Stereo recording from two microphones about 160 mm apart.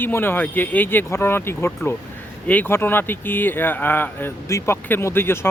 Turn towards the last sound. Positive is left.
turn(degrees=15)  # may be behind; listen again after turning